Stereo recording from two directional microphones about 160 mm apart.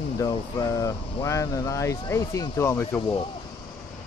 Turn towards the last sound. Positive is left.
turn(degrees=15)  # may be behind; listen again after turning